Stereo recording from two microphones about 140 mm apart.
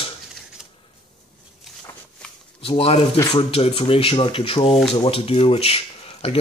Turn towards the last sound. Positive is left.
turn(degrees=45)  # may be behind; listen again after turning